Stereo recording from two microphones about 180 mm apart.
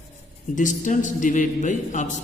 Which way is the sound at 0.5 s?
45° left (ahead or behind).